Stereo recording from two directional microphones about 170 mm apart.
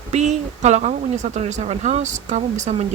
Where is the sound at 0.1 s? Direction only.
40° right (ahead or behind).